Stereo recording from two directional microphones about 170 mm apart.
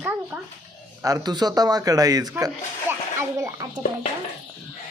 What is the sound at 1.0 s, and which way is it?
A man's voice, 25° right (ahead or behind).